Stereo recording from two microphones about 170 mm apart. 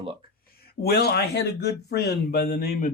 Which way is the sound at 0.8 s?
70° left (ahead or behind).